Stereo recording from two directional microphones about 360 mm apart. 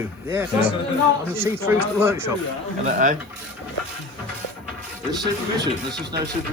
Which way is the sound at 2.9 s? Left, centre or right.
Right.